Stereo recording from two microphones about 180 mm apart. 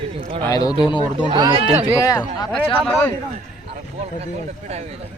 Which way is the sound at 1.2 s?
25° right (ahead or behind).